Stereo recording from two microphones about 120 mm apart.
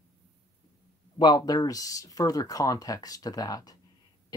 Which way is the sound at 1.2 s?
35° left (ahead or behind).